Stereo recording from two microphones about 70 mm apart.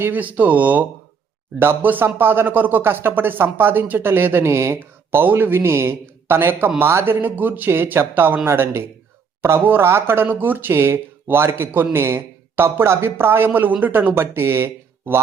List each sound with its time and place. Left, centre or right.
0.0 s speech: right
4.8 s a man's voice: right
14.2 s speech: right